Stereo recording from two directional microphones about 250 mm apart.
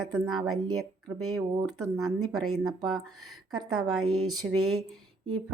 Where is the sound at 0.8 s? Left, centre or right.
Right.